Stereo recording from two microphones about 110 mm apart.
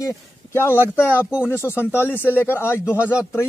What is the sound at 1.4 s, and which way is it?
A man's voice, 20° left (ahead or behind).